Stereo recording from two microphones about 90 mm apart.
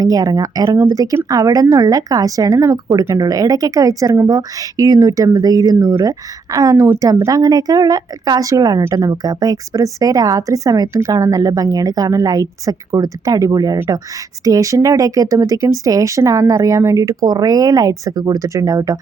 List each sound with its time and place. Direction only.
0.0 s speech: 45° right (ahead or behind)